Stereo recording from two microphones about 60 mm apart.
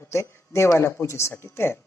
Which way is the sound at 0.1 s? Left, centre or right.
Left.